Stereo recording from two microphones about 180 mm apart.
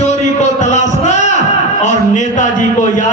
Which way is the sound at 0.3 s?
40° left (ahead or behind).